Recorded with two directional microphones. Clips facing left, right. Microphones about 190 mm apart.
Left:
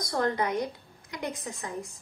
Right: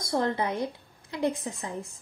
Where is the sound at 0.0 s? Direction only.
25° right (ahead or behind).